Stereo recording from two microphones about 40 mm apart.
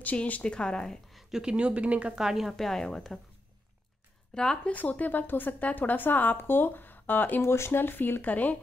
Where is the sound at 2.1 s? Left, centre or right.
Centre.